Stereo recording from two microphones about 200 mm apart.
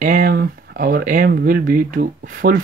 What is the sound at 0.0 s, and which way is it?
Speech, 45° right (ahead or behind).